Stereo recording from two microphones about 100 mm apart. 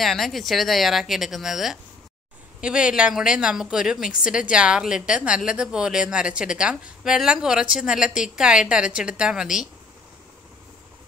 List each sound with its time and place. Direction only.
0.0 s a woman's voice: centre (ahead or behind)